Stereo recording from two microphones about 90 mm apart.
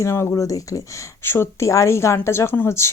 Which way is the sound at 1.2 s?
25° left (ahead or behind).